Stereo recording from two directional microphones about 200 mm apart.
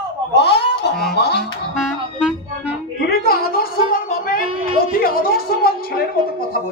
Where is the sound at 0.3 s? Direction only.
55° left (ahead or behind).